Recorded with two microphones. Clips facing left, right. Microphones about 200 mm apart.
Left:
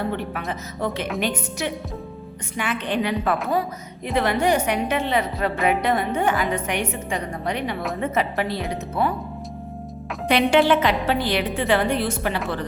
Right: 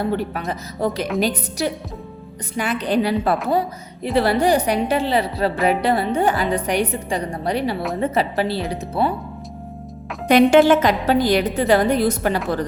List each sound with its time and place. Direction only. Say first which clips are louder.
0.0 s a woman's voice: right 4 dB; 35° right (ahead or behind)
10.2 s a woman's voice: right 5 dB; 45° right (ahead or behind)